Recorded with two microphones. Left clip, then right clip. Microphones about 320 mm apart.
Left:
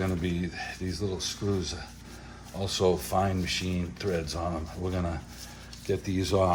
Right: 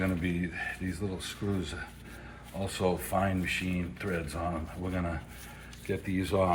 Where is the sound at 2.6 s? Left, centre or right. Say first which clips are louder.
Left 5 dB; left.